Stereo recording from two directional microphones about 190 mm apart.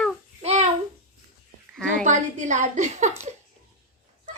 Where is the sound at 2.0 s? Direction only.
40° right (ahead or behind).